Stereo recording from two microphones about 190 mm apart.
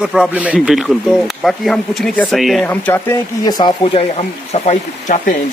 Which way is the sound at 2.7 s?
10° left (ahead or behind).